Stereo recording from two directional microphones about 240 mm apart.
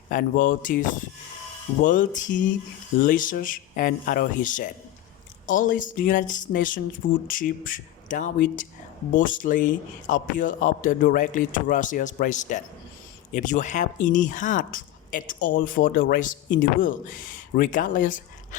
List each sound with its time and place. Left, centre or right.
0.1 s speech: left